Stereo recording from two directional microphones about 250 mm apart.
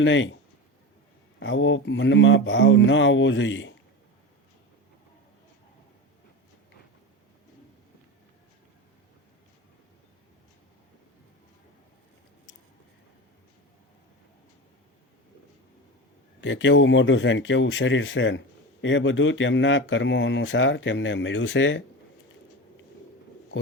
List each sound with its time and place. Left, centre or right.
0.0 s speech: left
1.4 s speech: left
16.4 s speech: left